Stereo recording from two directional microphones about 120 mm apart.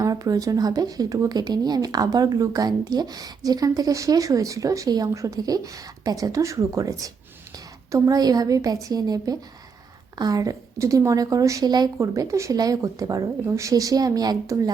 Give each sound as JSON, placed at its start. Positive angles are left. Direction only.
{"t": 0.0, "sound": "a woman's voice", "side_deg": -30}